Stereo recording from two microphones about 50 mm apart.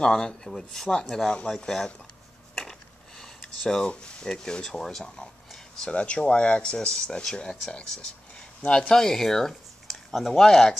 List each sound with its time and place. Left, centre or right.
0.0 s speech: centre
2.5 s a sound: centre
4.3 s speech: centre